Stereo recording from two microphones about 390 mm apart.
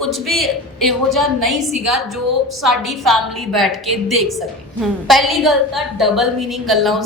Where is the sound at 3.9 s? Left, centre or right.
Right.